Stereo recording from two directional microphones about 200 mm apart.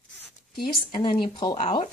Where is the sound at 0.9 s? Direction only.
25° left (ahead or behind).